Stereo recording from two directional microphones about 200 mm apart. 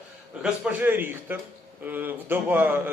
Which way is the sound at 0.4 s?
5° right (ahead or behind).